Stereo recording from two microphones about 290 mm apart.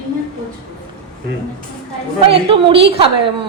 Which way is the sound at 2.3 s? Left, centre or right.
Centre.